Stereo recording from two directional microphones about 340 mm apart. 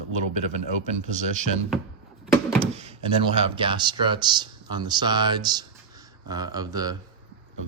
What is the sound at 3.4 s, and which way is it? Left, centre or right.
Speech, centre.